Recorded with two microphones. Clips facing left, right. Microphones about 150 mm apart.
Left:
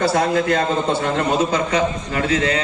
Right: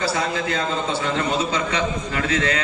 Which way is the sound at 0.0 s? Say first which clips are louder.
Left 6 dB; 55° left (ahead or behind).